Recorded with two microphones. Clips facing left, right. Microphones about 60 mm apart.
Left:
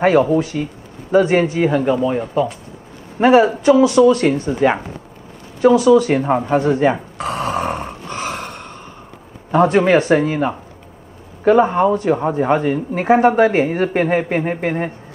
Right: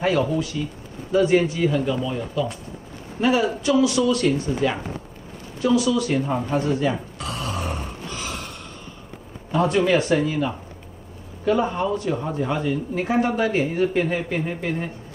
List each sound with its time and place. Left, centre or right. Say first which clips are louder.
0.0 s speech: left 8 dB; left
5.6 s a sound: left 9 dB; left
9.5 s speech: left 6 dB; left